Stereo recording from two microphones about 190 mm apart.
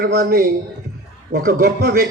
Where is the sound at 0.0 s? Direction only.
50° right (ahead or behind).